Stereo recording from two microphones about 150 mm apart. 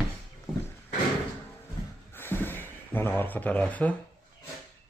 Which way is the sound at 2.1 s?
15° left (ahead or behind).